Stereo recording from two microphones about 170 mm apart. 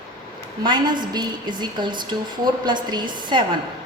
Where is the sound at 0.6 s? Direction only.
25° right (ahead or behind).